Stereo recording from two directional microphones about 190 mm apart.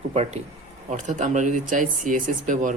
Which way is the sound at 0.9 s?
40° right (ahead or behind).